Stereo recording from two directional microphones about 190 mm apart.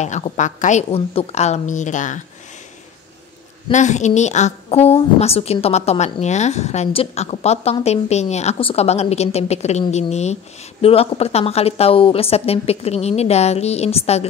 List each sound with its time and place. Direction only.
0.0 s a woman's voice: 40° left (ahead or behind)
3.7 s a woman's voice: 40° left (ahead or behind)